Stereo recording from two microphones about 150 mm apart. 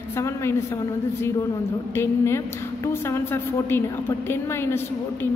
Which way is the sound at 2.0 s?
15° left (ahead or behind).